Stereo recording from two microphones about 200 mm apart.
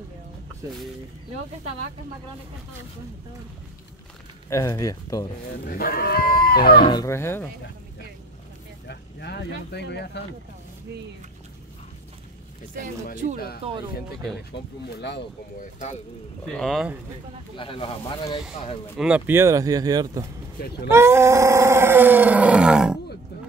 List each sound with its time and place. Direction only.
4.5 s speech: 15° left (ahead or behind)
5.5 s speech: 45° left (ahead or behind)
6.8 s speech: 20° left (ahead or behind)
8.8 s speech: 55° left (ahead or behind)
13.6 s speech: 30° right (ahead or behind)
14.5 s speech: 55° left (ahead or behind)
15.6 s speech: 35° left (ahead or behind)
16.4 s speech: centre (ahead or behind)
17.6 s speech: 25° left (ahead or behind)
18.9 s wild animals: 5° right (ahead or behind)